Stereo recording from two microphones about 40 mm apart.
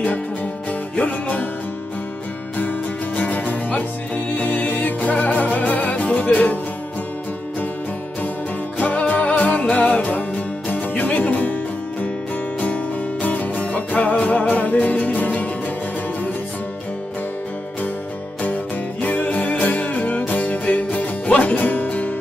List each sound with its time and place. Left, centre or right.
0.9 s music: left
3.2 s music: left
8.7 s music: left
12.5 s music: left
18.4 s music: left